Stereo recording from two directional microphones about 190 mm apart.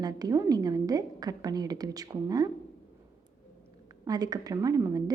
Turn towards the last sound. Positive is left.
turn(degrees=-20)  # may be behind; listen again after turning